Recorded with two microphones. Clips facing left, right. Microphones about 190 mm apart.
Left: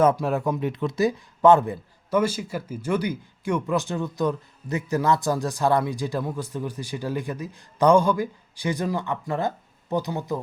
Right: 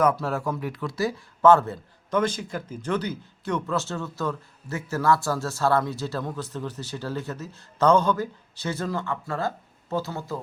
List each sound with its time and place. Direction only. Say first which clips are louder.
0.0 s speech: left 3 dB; 20° left (ahead or behind)